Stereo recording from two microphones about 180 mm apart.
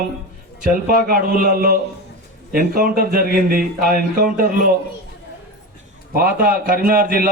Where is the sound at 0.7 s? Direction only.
55° right (ahead or behind).